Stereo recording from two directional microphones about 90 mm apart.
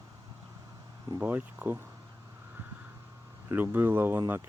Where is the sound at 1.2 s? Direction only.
20° right (ahead or behind).